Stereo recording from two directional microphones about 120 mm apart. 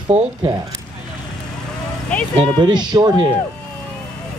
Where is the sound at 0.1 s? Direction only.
65° right (ahead or behind).